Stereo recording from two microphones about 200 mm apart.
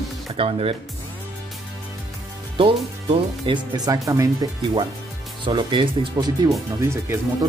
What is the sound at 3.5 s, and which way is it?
Speech, 20° right (ahead or behind).